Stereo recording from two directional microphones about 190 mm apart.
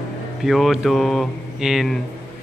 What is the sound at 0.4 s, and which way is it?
A man's voice, centre (ahead or behind).